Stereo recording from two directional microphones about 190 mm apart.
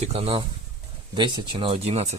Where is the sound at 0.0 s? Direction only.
35° right (ahead or behind).